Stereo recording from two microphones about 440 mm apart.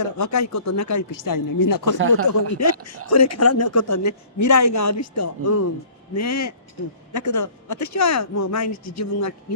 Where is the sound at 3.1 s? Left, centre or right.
Left.